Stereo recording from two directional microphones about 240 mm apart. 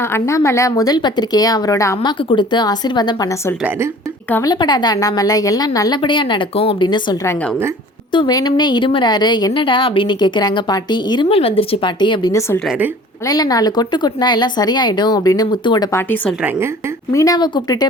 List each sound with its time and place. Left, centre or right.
0.0 s a woman's voice: centre